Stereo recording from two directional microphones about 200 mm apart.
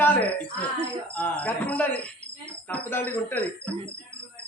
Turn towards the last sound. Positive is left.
turn(degrees=10)  # may be behind; listen again after turning